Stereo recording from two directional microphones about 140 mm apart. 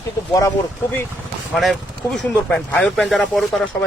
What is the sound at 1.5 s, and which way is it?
Speech, centre (ahead or behind).